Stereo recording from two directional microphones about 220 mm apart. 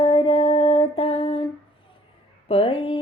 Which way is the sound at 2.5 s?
25° left (ahead or behind).